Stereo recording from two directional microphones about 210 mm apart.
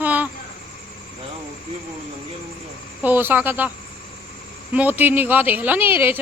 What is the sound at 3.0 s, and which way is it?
Speech, 10° right (ahead or behind).